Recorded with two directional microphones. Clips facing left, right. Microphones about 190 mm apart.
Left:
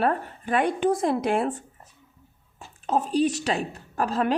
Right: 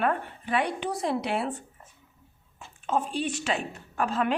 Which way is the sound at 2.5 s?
35° left (ahead or behind).